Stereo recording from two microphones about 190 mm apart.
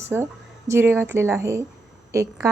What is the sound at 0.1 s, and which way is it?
A woman's voice, 5° right (ahead or behind).